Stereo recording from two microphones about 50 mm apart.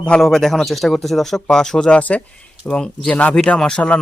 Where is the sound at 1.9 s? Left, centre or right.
Left.